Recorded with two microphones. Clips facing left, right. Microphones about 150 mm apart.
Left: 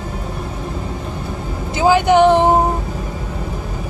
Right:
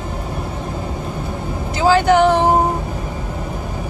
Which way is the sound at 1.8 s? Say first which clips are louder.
Left 1 dB; 15° left (ahead or behind).